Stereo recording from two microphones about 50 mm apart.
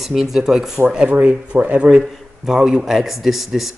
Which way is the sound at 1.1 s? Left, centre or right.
Right.